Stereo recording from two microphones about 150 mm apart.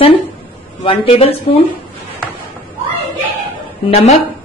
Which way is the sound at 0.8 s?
40° left (ahead or behind).